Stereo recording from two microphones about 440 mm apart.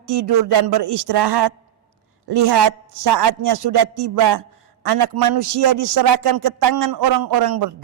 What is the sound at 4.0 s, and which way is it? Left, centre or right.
A man's voice, right.